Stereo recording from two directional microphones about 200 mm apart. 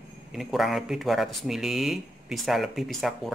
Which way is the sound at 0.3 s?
Centre (ahead or behind).